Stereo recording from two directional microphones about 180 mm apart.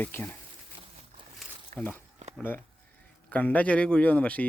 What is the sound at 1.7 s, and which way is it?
Speech, 10° left (ahead or behind).